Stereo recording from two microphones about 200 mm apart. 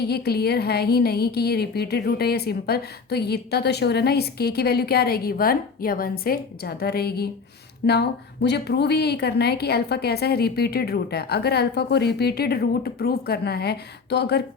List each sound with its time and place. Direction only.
0.0 s a woman's voice: 55° left (ahead or behind)